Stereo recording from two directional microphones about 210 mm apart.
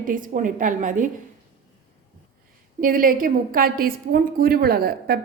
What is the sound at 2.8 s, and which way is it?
A woman's voice, 40° right (ahead or behind).